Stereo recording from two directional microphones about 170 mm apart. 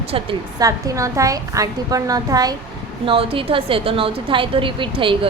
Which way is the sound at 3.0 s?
35° right (ahead or behind).